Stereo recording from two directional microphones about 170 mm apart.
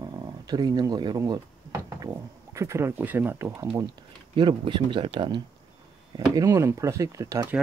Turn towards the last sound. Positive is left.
turn(degrees=-15)  # may be behind; listen again after turning